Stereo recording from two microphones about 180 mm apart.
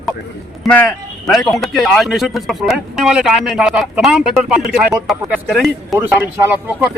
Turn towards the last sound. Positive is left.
turn(degrees=-5)  # may be behind; listen again after turning